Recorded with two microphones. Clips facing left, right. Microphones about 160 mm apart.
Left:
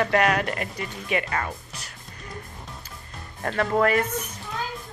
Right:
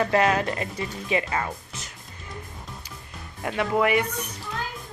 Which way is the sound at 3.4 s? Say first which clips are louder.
Left 1 dB; 15° right (ahead or behind).